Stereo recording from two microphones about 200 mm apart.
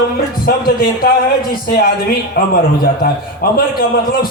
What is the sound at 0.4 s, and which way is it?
A man's voice, 45° left (ahead or behind).